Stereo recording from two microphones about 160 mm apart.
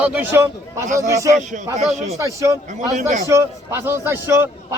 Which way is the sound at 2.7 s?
50° right (ahead or behind).